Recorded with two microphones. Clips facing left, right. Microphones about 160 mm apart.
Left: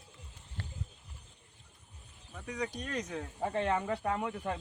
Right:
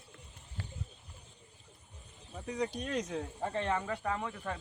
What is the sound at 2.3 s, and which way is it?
Speech, 25° right (ahead or behind).